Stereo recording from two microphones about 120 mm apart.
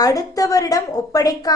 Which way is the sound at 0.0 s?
30° left (ahead or behind).